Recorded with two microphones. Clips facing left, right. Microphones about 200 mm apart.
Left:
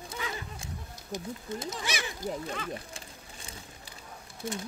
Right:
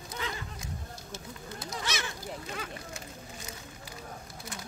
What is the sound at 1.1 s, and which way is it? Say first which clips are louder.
Speech: left 9 dB; 15° left (ahead or behind).